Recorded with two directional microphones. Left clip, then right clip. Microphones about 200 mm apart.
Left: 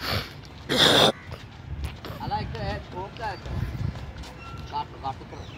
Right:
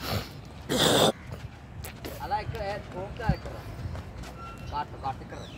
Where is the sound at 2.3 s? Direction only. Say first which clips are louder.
Even; 15° right (ahead or behind).